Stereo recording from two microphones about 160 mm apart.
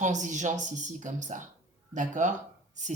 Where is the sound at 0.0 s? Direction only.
50° right (ahead or behind).